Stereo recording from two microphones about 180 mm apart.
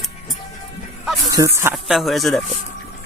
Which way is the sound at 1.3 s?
15° right (ahead or behind).